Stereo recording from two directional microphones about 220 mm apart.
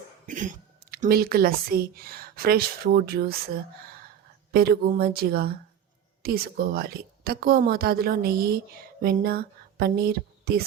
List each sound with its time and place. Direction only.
0.3 s a woman's voice: 35° right (ahead or behind)